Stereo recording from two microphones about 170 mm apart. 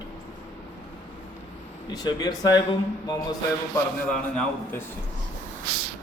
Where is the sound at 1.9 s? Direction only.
25° left (ahead or behind).